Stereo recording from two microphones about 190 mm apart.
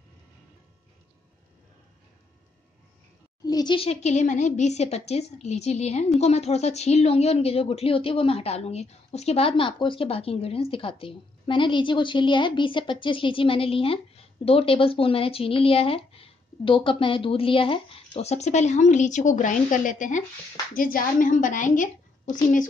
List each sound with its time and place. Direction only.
3.4 s a woman's voice: 20° left (ahead or behind); by 21.8 s 45° left (ahead or behind)